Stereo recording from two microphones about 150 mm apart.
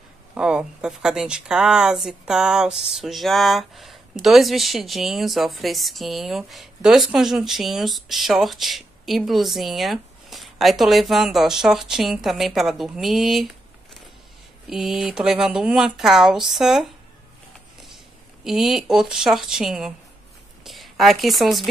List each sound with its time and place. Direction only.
0.3 s speech: 5° right (ahead or behind)
14.7 s speech: centre (ahead or behind)
18.4 s a woman's voice: centre (ahead or behind)